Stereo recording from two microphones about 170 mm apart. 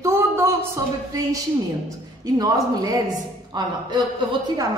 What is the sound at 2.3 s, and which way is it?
A woman's voice, 20° right (ahead or behind).